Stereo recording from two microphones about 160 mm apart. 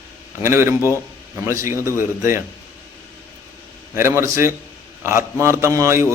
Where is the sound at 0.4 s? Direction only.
15° right (ahead or behind).